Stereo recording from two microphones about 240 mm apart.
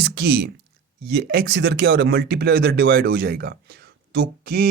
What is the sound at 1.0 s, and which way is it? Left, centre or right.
Speech, right.